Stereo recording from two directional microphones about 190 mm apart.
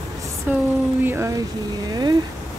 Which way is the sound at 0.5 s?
10° right (ahead or behind).